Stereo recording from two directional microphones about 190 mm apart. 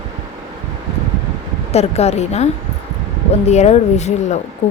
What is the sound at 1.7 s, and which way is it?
A woman's voice, 35° left (ahead or behind).